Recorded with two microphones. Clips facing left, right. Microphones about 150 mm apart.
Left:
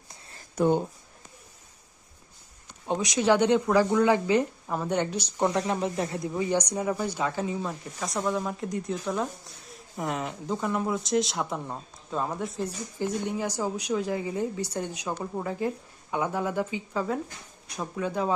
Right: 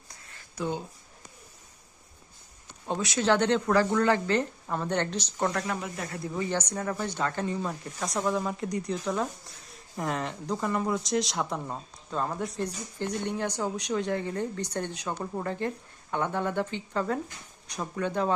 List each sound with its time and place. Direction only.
0.1 s a sound: 35° left (ahead or behind)
0.5 s speech: 55° left (ahead or behind)
2.8 s speech: 15° left (ahead or behind)